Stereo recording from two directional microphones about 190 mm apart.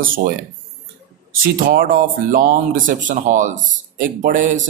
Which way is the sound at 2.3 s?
45° right (ahead or behind).